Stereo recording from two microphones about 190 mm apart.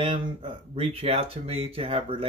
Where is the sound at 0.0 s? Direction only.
25° right (ahead or behind).